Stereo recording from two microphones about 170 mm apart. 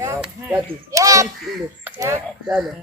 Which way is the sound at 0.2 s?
5° right (ahead or behind).